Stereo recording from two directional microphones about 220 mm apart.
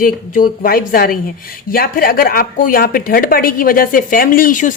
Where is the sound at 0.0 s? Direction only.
40° left (ahead or behind).